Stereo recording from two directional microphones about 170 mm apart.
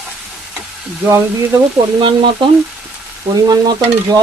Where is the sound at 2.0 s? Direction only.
30° right (ahead or behind).